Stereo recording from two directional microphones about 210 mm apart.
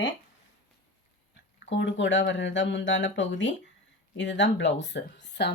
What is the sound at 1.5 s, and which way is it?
Speech, 60° left (ahead or behind).